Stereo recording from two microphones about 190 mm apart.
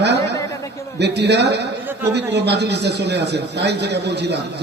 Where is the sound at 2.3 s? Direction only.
60° right (ahead or behind).